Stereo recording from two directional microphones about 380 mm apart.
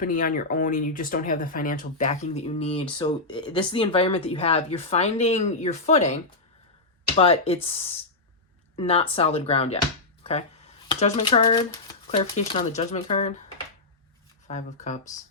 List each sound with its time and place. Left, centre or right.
0.0 s speech: left
7.2 s speech: centre
10.8 s speech: centre
14.4 s speech: centre